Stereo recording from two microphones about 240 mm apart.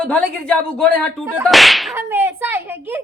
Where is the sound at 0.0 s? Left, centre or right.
Centre.